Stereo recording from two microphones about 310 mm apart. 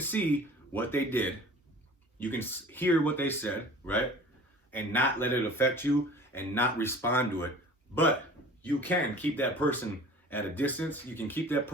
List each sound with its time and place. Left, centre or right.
0.0 s speech: centre
8.6 s speech: centre